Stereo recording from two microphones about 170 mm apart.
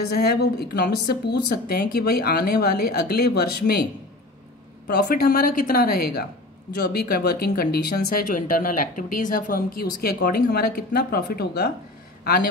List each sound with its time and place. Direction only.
0.1 s speech: 70° left (ahead or behind)
4.8 s speech: 70° left (ahead or behind)